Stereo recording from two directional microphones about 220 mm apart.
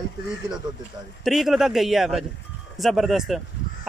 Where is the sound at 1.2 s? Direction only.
Centre (ahead or behind).